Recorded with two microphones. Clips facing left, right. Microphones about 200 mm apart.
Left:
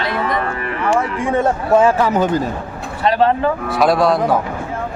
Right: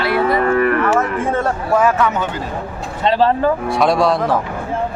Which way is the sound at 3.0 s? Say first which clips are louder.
Even; 30° right (ahead or behind).